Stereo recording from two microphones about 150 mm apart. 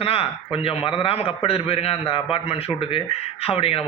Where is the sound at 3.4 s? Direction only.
40° left (ahead or behind).